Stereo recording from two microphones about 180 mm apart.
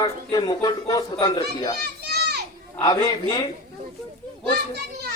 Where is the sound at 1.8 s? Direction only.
65° right (ahead or behind).